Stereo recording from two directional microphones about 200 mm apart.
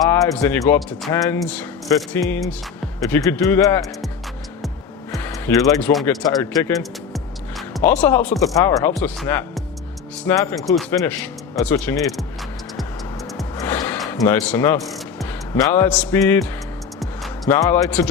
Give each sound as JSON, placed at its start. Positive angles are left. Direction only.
{"t": 0.1, "sound": "speech", "side_deg": 10}
{"t": 5.5, "sound": "speech", "side_deg": 10}
{"t": 6.2, "sound": "speech", "side_deg": 10}
{"t": 7.1, "sound": "music", "side_deg": 0}
{"t": 8.5, "sound": "speech", "side_deg": 15}
{"t": 10.2, "sound": "speech", "side_deg": 15}
{"t": 13.6, "sound": "gasp", "side_deg": 15}
{"t": 14.1, "sound": "speech", "side_deg": 10}
{"t": 14.9, "sound": "music", "side_deg": 0}
{"t": 15.6, "sound": "speech", "side_deg": 10}
{"t": 17.0, "sound": "music", "side_deg": 0}
{"t": 17.5, "sound": "speech", "side_deg": 10}